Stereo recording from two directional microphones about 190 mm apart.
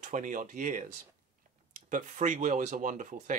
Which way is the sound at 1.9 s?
40° right (ahead or behind).